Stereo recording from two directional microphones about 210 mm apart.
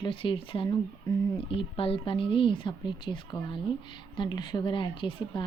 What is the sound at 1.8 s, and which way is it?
Speech, 25° left (ahead or behind).